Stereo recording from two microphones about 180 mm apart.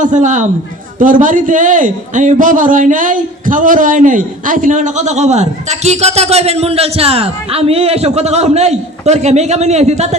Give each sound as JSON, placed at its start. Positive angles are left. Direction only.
{"t": 0.0, "sound": "a woman's voice", "side_deg": -45}